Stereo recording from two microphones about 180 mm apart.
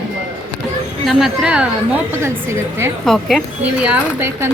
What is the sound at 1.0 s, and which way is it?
Speech, centre (ahead or behind).